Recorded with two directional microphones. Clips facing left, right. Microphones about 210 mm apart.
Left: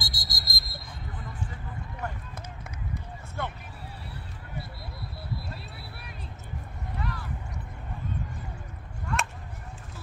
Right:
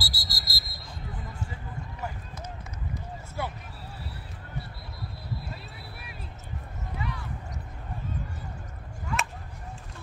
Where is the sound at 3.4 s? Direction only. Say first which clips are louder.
Right 1 dB; 5° right (ahead or behind).